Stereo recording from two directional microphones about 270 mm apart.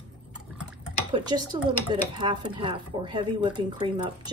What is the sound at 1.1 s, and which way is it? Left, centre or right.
Speech, centre.